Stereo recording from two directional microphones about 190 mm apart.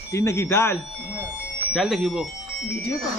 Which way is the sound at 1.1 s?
5° right (ahead or behind).